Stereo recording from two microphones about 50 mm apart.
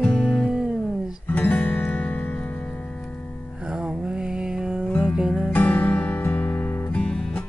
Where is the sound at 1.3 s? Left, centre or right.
Left.